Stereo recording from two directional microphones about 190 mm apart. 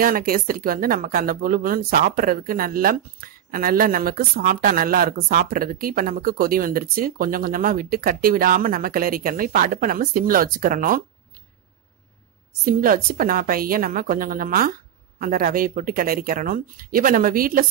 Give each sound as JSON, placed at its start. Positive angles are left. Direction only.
{"t": 0.0, "sound": "speech", "side_deg": -50}
{"t": 12.6, "sound": "speech", "side_deg": -50}